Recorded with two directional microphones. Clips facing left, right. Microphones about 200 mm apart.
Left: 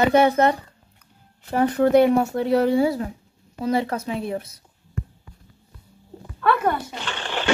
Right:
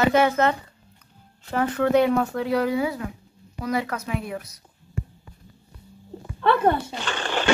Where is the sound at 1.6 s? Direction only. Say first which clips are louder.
Left 4 dB; 35° left (ahead or behind).